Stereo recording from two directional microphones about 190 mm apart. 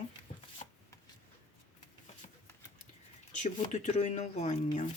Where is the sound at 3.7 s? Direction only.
40° left (ahead or behind).